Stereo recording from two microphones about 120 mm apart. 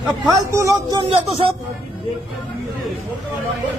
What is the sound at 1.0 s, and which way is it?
Speech, 50° right (ahead or behind).